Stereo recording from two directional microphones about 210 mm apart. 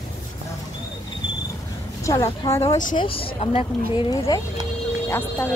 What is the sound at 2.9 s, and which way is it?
Speech, 25° left (ahead or behind).